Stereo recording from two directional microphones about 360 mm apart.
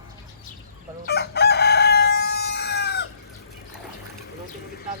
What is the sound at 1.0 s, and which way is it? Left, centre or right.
Chicken, left.